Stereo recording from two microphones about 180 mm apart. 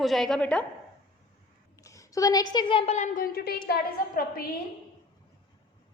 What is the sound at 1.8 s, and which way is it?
A woman's voice, 15° left (ahead or behind).